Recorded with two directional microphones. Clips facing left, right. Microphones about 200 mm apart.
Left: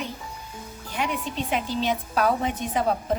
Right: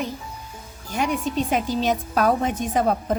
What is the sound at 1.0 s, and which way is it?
A woman's voice, 45° right (ahead or behind).